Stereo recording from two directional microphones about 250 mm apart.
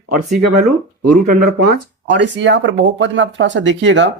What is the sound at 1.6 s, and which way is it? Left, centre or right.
Speech, right.